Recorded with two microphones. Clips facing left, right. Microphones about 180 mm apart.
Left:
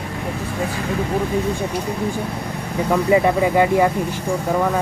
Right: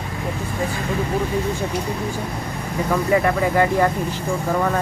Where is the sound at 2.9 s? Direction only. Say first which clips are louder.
Left 3 dB; 15° left (ahead or behind).